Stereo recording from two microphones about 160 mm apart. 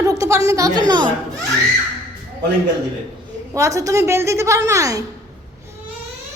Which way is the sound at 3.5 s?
20° right (ahead or behind).